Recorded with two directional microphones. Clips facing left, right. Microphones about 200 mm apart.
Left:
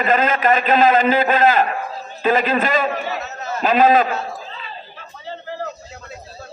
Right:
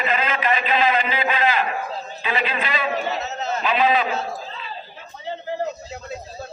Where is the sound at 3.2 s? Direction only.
20° right (ahead or behind).